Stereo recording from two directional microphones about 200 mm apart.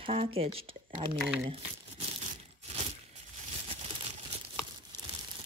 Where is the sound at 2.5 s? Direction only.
35° right (ahead or behind).